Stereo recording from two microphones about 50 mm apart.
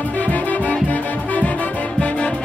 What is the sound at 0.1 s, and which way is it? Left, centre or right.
Music, left.